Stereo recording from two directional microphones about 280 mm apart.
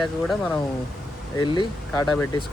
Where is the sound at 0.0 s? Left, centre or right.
Centre.